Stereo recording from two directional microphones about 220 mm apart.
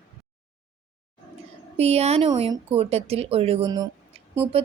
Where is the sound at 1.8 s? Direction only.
30° right (ahead or behind).